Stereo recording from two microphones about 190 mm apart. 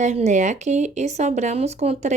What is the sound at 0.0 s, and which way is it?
Speech, 35° right (ahead or behind).